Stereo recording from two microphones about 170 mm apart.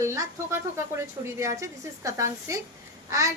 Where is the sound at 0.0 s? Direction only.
15° right (ahead or behind).